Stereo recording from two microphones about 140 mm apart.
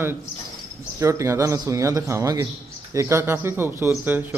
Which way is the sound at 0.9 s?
20° right (ahead or behind).